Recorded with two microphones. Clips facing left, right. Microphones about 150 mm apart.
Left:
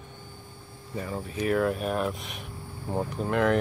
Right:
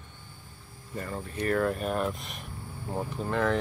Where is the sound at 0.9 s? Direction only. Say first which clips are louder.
Left 2 dB; centre (ahead or behind).